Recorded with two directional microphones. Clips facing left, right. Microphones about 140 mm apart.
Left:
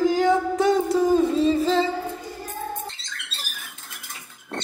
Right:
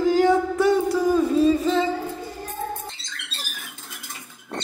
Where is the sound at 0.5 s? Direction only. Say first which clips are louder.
Even; 20° left (ahead or behind).